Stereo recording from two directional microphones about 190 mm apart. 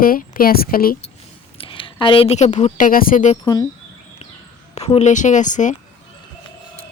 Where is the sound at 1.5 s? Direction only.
30° left (ahead or behind); by 3.3 s 45° left (ahead or behind).